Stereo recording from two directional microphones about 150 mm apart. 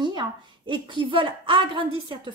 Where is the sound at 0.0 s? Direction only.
30° right (ahead or behind).